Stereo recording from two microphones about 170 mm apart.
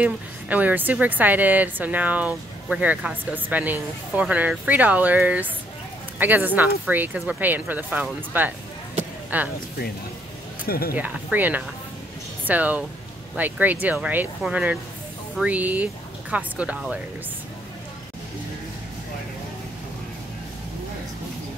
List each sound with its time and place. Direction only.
0.0 s a woman's voice: 10° right (ahead or behind)
10.7 s speech: 60° left (ahead or behind)
11.0 s a woman's voice: 10° right (ahead or behind)